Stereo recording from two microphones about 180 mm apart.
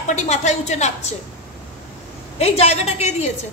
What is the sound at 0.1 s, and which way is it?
A woman's voice, 40° left (ahead or behind).